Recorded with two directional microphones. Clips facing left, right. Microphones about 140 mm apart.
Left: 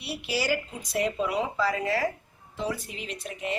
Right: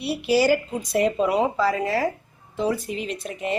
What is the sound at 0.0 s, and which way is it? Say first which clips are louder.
Speech: right 10 dB; 40° right (ahead or behind).